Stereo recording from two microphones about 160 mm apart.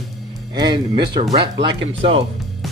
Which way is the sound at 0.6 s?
30° right (ahead or behind).